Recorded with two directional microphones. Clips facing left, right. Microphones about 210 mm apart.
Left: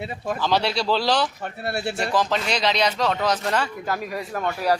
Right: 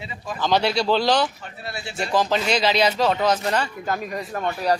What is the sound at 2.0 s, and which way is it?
Speech, centre (ahead or behind).